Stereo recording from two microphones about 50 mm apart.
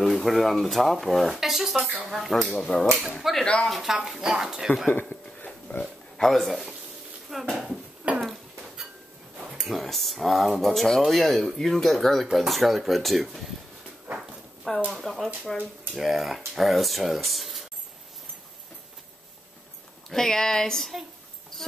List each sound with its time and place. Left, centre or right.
0.0 s speech: centre
2.7 s speech: left
3.2 s a sound: centre
3.6 s speech: centre
5.1 s dog: left
6.1 s speech: centre
7.2 s a sound: centre
8.0 s a sound: right
9.6 s speech: centre
14.9 s speech: centre
20.1 s speech: centre